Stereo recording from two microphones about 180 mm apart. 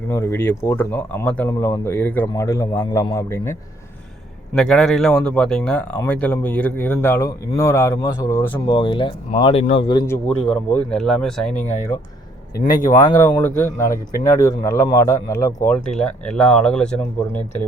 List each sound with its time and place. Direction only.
0.1 s speech: 15° left (ahead or behind)
4.5 s speech: 5° left (ahead or behind)
8.6 s speech: 30° left (ahead or behind)
9.8 s speech: 20° left (ahead or behind)
10.2 s speech: 5° left (ahead or behind)
13.0 s speech: 20° left (ahead or behind)
15.6 s speech: 5° left (ahead or behind)